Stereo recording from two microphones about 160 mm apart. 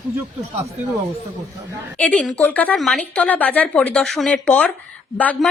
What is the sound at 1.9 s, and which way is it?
Speech, 5° left (ahead or behind).